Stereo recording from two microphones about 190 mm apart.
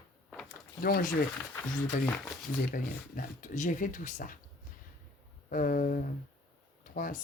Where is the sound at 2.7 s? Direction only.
45° left (ahead or behind).